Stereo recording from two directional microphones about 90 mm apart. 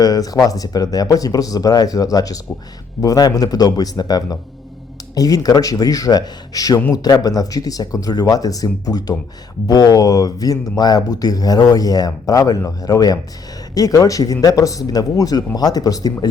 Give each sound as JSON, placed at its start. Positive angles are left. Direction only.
{"t": 0.0, "sound": "speech", "side_deg": 45}